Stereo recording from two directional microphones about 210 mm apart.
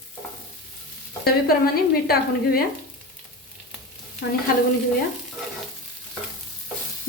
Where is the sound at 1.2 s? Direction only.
45° left (ahead or behind).